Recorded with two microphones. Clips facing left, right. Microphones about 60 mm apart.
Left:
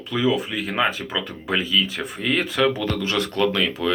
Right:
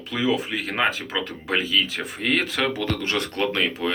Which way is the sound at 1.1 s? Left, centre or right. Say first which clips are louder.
Left 1 dB; right.